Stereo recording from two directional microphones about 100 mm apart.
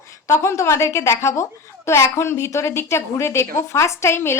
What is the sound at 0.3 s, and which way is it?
A woman's voice, 25° left (ahead or behind).